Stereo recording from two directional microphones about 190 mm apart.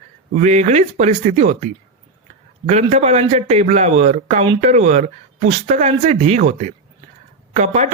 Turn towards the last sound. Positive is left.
turn(degrees=-35)  # may be behind; listen again after turning